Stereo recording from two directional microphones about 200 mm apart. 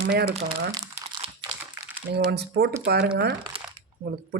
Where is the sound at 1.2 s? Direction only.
25° right (ahead or behind).